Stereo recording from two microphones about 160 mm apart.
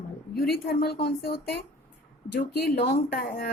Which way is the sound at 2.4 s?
75° left (ahead or behind).